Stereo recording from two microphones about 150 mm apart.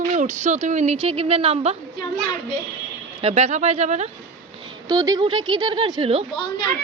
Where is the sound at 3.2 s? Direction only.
45° right (ahead or behind).